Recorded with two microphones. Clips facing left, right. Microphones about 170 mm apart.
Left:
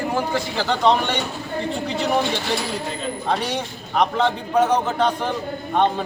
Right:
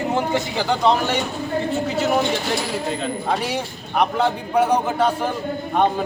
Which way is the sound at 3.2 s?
5° right (ahead or behind).